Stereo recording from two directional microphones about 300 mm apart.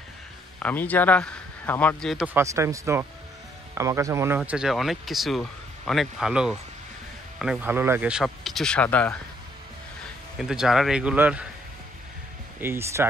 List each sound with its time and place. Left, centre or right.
0.6 s speech: centre
10.4 s speech: centre
12.5 s speech: centre